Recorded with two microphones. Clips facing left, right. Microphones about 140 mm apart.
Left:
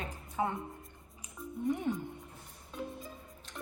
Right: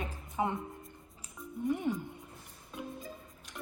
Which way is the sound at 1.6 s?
5° right (ahead or behind).